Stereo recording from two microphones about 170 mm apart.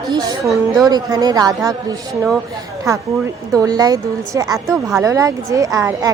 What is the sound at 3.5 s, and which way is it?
A woman's voice, 20° right (ahead or behind).